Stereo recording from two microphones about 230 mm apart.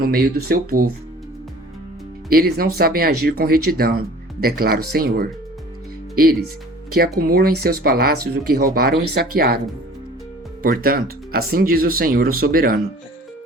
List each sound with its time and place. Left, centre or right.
0.0 s speech: right
2.3 s speech: right
7.2 s speech: right
10.6 s speech: right